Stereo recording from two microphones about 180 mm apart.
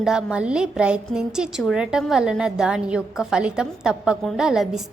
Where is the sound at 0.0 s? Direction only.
5° right (ahead or behind).